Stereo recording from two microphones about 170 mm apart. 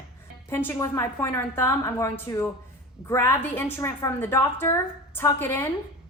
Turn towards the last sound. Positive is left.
turn(degrees=15)  # may be behind; listen again after turning